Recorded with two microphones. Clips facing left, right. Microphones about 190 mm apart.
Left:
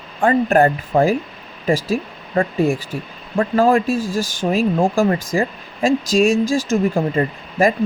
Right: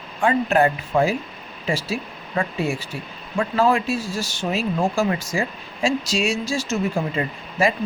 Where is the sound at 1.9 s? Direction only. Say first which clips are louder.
Left 6 dB; 55° left (ahead or behind).